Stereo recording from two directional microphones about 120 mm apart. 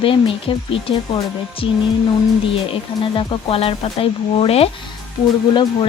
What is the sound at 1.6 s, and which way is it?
Speech, 45° left (ahead or behind).